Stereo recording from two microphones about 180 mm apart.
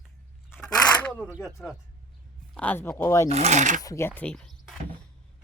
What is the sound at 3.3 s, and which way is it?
Speech, 35° right (ahead or behind).